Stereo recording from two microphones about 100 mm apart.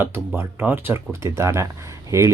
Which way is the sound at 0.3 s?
20° right (ahead or behind).